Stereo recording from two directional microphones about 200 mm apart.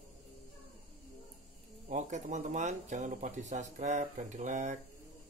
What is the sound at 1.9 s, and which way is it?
Speech, 35° right (ahead or behind).